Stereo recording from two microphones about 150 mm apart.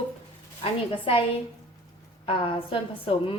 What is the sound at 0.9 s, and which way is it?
Speech, 35° left (ahead or behind).